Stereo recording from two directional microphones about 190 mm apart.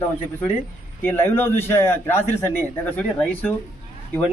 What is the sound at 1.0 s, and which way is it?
A man's voice, 10° left (ahead or behind).